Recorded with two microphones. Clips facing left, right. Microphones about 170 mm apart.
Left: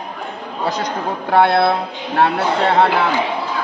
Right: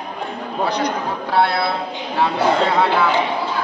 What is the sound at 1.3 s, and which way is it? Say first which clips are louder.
Speech: left 5 dB; 60° left (ahead or behind).